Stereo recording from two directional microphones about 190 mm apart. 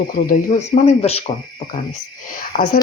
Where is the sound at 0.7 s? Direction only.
30° left (ahead or behind).